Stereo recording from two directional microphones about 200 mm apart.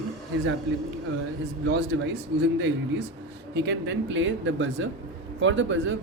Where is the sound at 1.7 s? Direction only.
65° right (ahead or behind).